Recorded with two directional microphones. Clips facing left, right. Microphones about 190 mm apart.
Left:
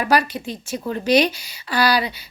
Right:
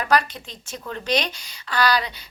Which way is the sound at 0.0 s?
10° left (ahead or behind).